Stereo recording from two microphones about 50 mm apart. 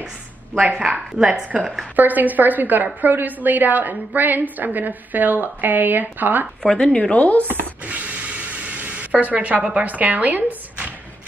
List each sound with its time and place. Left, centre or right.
0.6 s speech: right
1.1 s speech: centre
2.0 s a woman's voice: right
6.6 s speech: centre; by 7.4 s left
7.4 s a sound: right
9.8 s speech: right